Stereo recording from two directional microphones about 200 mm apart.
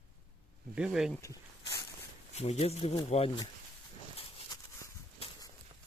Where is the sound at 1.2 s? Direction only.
15° left (ahead or behind).